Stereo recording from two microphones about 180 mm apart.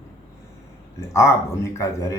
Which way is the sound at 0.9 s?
15° left (ahead or behind).